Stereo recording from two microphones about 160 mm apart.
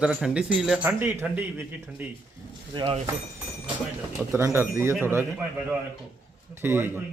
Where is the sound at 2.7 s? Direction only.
35° right (ahead or behind).